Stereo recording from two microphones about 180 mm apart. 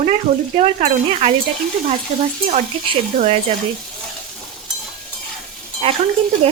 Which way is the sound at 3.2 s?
35° right (ahead or behind).